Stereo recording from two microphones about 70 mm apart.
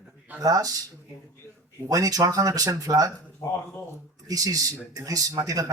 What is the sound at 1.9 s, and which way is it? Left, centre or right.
Speech, right.